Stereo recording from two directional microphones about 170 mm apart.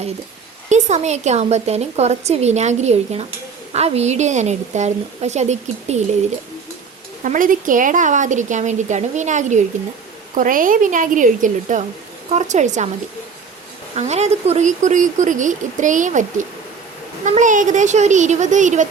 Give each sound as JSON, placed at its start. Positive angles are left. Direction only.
{"t": 0.7, "sound": "a woman's voice", "side_deg": -45}
{"t": 7.3, "sound": "speech", "side_deg": -50}
{"t": 13.9, "sound": "speech", "side_deg": -40}